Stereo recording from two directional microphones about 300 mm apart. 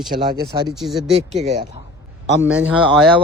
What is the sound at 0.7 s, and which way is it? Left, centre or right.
Speech, centre.